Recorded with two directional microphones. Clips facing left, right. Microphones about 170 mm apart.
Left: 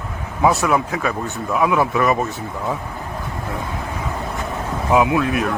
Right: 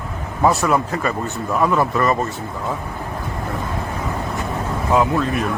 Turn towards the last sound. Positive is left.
turn(degrees=5)  # may be behind; listen again after turning